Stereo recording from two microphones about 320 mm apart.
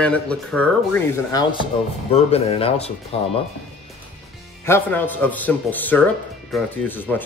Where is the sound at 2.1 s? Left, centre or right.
Centre.